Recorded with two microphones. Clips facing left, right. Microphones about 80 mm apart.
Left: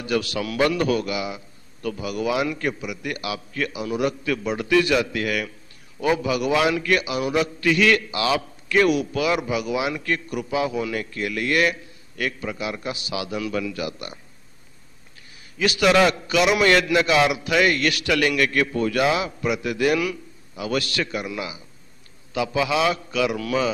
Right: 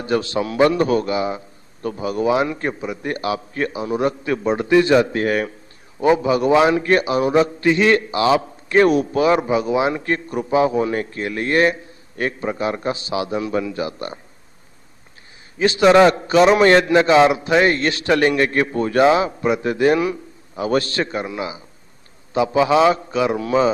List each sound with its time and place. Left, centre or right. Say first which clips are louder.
0.0 s a man's voice: right 4 dB; right
15.5 s a man's voice: right 6 dB; right